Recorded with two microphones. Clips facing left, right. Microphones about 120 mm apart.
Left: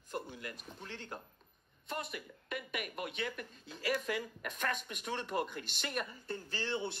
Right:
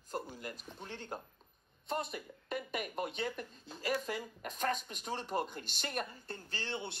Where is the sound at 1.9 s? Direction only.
30° right (ahead or behind).